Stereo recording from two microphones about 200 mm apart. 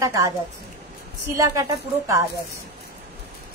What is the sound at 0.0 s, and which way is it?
Speech, 15° right (ahead or behind).